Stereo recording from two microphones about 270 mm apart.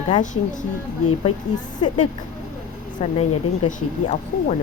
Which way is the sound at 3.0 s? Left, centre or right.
Left.